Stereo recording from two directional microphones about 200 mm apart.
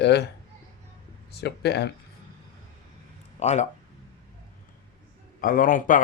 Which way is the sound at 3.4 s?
35° left (ahead or behind).